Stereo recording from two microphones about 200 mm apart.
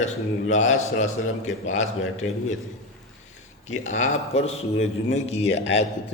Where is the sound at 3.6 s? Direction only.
35° left (ahead or behind).